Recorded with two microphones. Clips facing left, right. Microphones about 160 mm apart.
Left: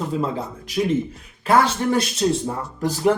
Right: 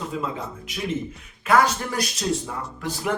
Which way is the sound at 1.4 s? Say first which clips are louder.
Left 2 dB; 30° left (ahead or behind).